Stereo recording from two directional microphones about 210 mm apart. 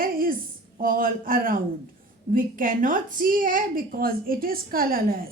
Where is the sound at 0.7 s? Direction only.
40° right (ahead or behind).